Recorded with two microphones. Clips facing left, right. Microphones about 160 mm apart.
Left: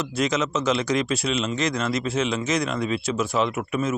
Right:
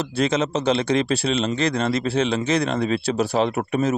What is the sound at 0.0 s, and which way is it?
Speech, 30° right (ahead or behind).